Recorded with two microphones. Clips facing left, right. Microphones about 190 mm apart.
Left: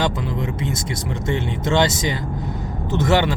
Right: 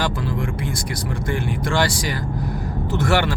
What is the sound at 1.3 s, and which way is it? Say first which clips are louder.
Speech: left 3 dB; 20° left (ahead or behind).